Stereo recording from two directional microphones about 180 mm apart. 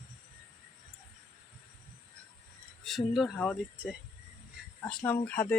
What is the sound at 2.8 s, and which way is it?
Speech, centre (ahead or behind).